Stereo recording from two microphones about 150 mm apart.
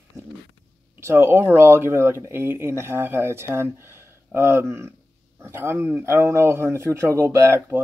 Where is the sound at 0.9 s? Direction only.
15° right (ahead or behind).